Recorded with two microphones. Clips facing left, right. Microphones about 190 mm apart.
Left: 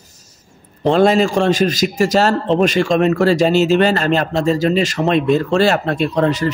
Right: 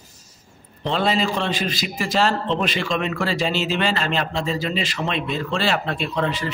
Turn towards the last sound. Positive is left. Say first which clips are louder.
# left 8 dB
turn(degrees=40)  # may be behind; listen again after turning